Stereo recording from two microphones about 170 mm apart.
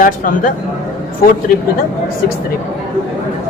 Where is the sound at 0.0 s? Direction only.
55° left (ahead or behind).